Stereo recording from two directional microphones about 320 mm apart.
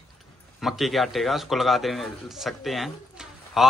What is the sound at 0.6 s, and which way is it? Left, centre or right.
Speech, centre.